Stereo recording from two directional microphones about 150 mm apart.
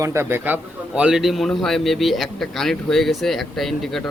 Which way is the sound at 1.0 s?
5° right (ahead or behind).